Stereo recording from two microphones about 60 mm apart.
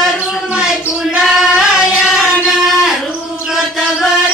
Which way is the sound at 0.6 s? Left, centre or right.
Centre.